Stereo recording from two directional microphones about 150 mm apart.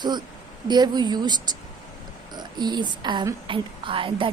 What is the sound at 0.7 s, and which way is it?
A woman's voice, 30° right (ahead or behind).